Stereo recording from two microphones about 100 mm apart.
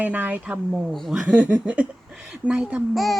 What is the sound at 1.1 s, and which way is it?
Speech, 15° right (ahead or behind).